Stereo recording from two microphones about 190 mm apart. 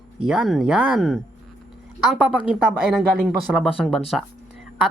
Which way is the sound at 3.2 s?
Centre (ahead or behind).